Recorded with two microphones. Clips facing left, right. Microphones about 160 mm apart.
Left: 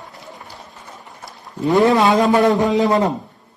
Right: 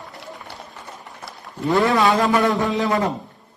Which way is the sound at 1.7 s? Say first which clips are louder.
Left 4 dB; 20° left (ahead or behind).